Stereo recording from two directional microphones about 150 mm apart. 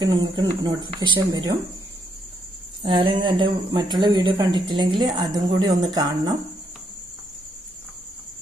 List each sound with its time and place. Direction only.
0.0 s speech: 25° right (ahead or behind)
2.8 s speech: 30° right (ahead or behind)